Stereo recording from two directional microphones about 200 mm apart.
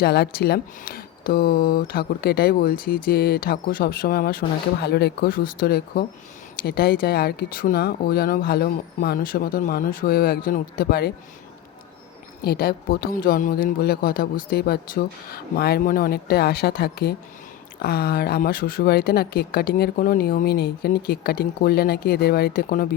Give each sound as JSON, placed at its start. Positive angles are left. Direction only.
{"t": 0.0, "sound": "speech", "side_deg": 55}
{"t": 12.4, "sound": "speech", "side_deg": 50}